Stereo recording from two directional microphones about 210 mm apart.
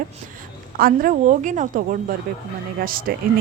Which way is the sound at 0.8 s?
40° right (ahead or behind).